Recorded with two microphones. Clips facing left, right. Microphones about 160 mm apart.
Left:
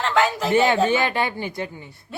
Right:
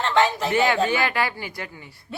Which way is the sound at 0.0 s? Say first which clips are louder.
Even; 5° left (ahead or behind).